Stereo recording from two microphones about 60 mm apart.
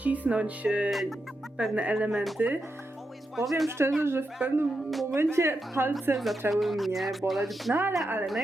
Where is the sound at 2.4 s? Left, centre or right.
Right.